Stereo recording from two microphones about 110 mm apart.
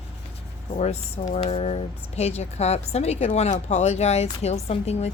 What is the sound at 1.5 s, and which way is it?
A woman's voice, 75° left (ahead or behind).